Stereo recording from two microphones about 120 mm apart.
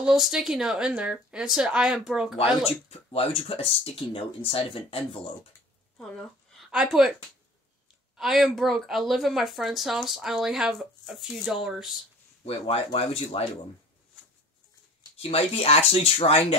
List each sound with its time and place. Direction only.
0.0 s speech: 5° right (ahead or behind)
2.9 s speech: 55° left (ahead or behind)
5.9 s a sound: 5° left (ahead or behind)
6.8 s speech: 5° right (ahead or behind)
8.2 s speech: centre (ahead or behind)
12.4 s speech: 55° left (ahead or behind)
15.1 s speech: 55° left (ahead or behind)